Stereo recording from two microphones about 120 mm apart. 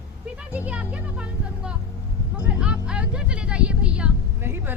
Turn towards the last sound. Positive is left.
turn(degrees=-15)  # may be behind; listen again after turning